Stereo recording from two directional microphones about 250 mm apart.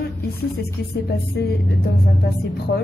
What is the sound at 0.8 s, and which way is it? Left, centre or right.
A woman's voice, left.